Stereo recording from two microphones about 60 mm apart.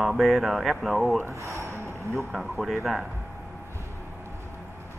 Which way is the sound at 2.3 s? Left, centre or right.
Centre.